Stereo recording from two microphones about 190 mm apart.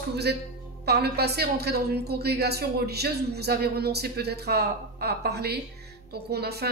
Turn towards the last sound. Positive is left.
turn(degrees=-55)  # may be behind; listen again after turning